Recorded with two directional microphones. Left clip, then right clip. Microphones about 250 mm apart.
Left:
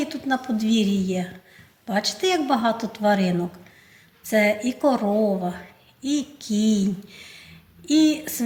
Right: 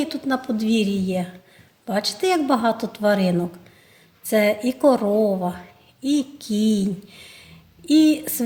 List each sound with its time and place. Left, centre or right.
0.0 s a woman's voice: right